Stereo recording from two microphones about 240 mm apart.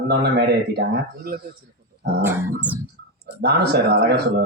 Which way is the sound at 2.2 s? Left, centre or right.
Centre.